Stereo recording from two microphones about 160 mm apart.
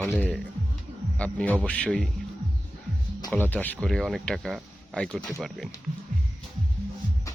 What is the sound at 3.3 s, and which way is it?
Speech, 10° left (ahead or behind).